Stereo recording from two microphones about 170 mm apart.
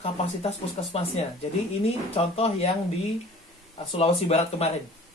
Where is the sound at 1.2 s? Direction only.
40° left (ahead or behind).